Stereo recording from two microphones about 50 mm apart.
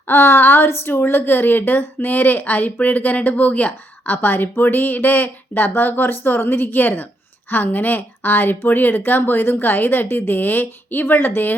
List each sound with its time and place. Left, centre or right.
0.1 s a woman's voice: left